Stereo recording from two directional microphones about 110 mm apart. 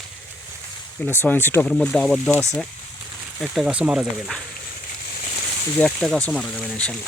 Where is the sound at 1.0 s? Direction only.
20° left (ahead or behind).